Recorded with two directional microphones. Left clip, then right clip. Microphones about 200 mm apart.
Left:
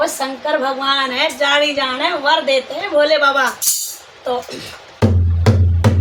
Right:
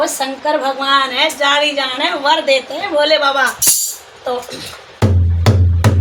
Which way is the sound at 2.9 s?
Centre (ahead or behind).